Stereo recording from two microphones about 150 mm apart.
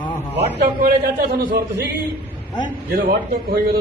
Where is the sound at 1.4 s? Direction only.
85° right.